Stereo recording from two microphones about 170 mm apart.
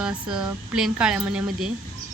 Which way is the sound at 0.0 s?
5° right (ahead or behind).